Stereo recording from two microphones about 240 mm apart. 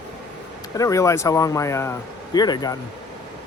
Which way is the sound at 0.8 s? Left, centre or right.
Centre.